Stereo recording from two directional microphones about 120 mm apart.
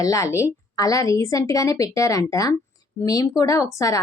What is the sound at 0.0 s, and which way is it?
A woman's voice, 25° left (ahead or behind).